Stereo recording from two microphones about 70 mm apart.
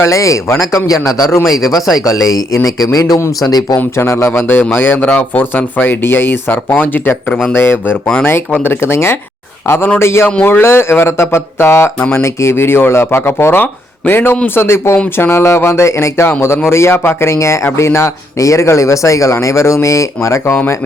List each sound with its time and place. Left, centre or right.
0.0 s speech: left
0.9 s a man's voice: left
3.4 s speech: left
3.9 s speech: left